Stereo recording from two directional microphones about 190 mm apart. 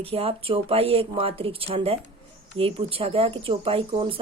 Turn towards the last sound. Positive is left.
turn(degrees=-30)  # may be behind; listen again after turning